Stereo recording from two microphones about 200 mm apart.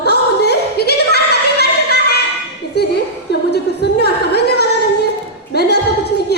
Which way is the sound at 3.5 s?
55° left (ahead or behind).